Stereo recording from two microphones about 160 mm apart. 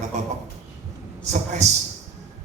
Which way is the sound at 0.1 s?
45° right (ahead or behind).